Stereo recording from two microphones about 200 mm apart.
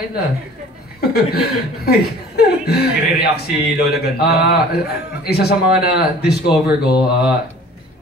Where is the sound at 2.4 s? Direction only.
55° left (ahead or behind).